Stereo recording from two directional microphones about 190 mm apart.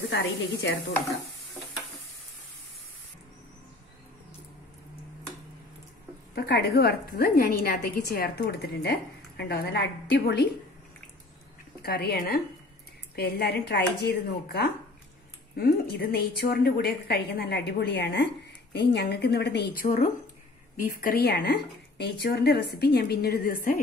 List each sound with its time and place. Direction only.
0.1 s speech: 70° left (ahead or behind)
6.3 s a woman's voice: 55° left (ahead or behind)
11.8 s a woman's voice: 55° left (ahead or behind)
19.8 s a woman's voice: 45° left (ahead or behind)